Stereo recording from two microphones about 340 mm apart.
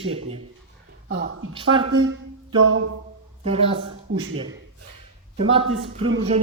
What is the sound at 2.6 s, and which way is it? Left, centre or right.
Speech, right.